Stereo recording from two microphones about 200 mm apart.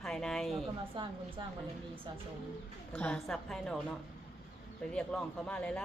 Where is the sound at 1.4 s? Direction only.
25° right (ahead or behind).